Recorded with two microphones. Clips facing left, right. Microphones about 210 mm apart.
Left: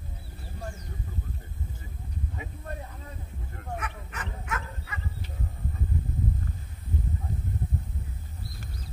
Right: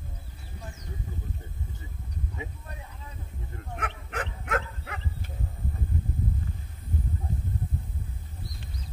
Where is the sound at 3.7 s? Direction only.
55° right (ahead or behind).